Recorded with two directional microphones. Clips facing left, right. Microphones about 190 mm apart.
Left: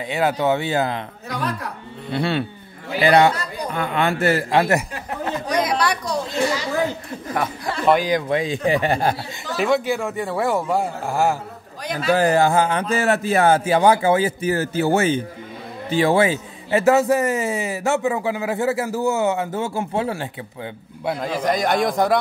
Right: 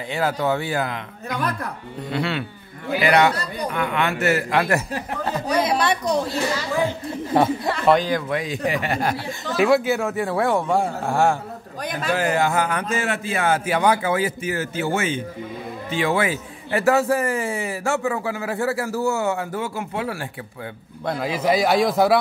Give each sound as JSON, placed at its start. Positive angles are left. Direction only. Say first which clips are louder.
{"t": 0.1, "sound": "a man's voice", "louder": "left 2 dB", "side_deg": 20}
{"t": 5.6, "sound": "a woman's voice", "louder": "even", "side_deg": -25}
{"t": 7.3, "sound": "speech", "louder": "right 6 dB", "side_deg": -30}
{"t": 7.8, "sound": "a man's voice", "louder": "left 1 dB", "side_deg": 5}
{"t": 8.1, "sound": "a man's voice", "louder": "left 3 dB", "side_deg": 25}
{"t": 9.6, "sound": "a man's voice", "louder": "right 2 dB", "side_deg": -5}
{"t": 11.8, "sound": "a man's voice", "louder": "left 1 dB", "side_deg": -50}
{"t": 12.1, "sound": "a man's voice", "louder": "left 5 dB", "side_deg": 35}
{"t": 21.2, "sound": "a man's voice", "louder": "right 2 dB", "side_deg": -5}